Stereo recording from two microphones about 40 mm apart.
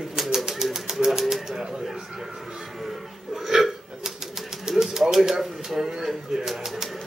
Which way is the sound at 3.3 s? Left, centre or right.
Centre.